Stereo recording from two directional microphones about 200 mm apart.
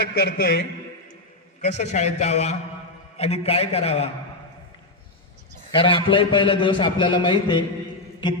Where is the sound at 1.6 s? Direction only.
35° left (ahead or behind).